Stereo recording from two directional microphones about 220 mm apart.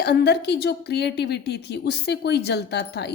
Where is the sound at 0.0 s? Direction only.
50° left (ahead or behind).